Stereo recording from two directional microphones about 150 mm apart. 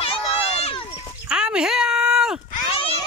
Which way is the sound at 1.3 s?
5° right (ahead or behind).